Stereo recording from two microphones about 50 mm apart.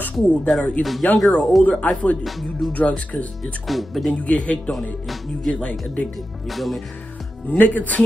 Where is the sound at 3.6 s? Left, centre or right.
Centre.